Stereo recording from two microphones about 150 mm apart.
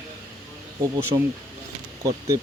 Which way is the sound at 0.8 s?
20° right (ahead or behind).